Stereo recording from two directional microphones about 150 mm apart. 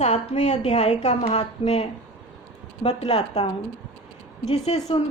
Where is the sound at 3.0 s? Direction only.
45° left (ahead or behind).